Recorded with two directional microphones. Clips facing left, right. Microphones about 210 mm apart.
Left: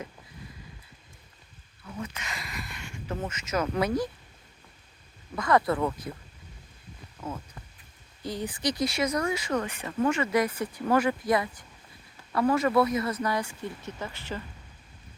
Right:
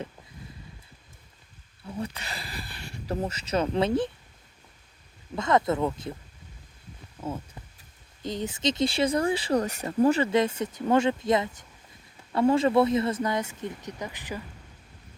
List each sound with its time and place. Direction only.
1.8 s speech: 30° right (ahead or behind)
5.3 s speech: 20° right (ahead or behind)
8.2 s speech: 20° right (ahead or behind)